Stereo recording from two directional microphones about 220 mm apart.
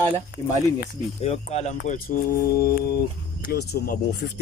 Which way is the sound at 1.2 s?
30° left (ahead or behind).